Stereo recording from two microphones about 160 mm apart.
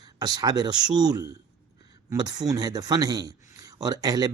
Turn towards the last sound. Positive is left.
turn(degrees=-25)  # may be behind; listen again after turning